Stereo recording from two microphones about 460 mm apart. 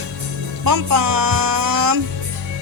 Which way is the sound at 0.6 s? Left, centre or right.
Right.